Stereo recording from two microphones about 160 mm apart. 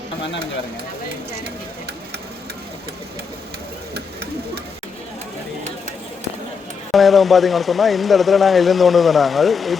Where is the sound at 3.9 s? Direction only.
90° right.